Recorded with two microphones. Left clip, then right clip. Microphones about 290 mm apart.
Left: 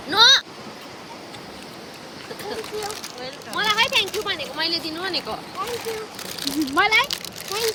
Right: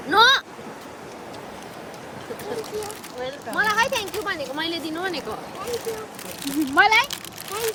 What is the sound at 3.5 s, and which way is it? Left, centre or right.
Speech, right.